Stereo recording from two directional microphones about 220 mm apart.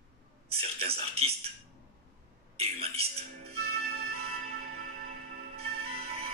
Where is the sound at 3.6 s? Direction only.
45° right (ahead or behind).